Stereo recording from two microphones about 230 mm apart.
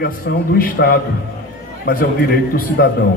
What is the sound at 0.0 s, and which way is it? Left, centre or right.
A man's voice, left.